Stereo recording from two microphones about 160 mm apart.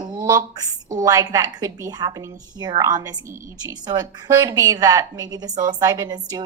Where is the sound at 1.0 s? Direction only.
25° right (ahead or behind).